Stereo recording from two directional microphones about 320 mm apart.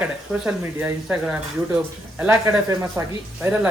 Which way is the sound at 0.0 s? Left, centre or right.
Centre.